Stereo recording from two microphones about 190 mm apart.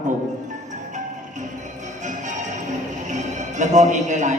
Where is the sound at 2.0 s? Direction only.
40° right (ahead or behind).